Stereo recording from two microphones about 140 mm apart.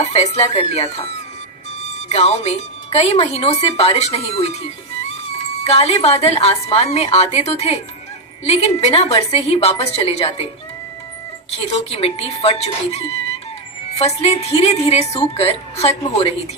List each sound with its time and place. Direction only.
0.0 s a woman's voice: 50° left (ahead or behind)
11.5 s a woman's voice: 45° left (ahead or behind)